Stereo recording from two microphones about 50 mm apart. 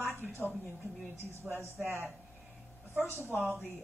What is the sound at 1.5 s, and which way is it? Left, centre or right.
Speech, right.